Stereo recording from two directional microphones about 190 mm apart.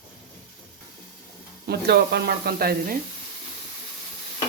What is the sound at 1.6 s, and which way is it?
Speech, 60° right (ahead or behind).